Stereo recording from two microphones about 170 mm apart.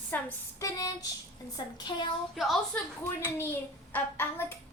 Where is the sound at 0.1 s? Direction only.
10° left (ahead or behind).